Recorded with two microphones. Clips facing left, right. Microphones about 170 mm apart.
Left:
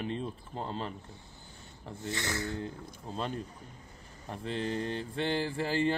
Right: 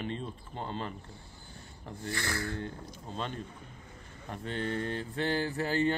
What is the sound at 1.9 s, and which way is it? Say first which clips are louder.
Speech: even; 20° left (ahead or behind).